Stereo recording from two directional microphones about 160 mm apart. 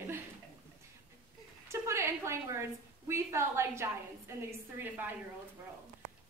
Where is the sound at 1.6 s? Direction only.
15° right (ahead or behind).